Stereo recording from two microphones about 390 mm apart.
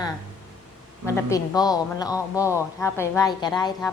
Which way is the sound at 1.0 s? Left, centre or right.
Centre.